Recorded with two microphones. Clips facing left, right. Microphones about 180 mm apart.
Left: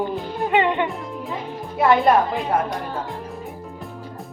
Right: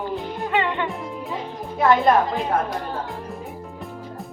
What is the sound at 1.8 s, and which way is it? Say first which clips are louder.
Music: left 1 dB; 5° left (ahead or behind).